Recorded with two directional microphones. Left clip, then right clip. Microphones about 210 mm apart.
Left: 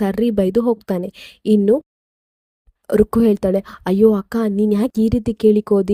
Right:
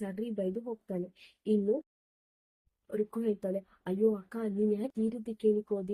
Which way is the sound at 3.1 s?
50° left (ahead or behind).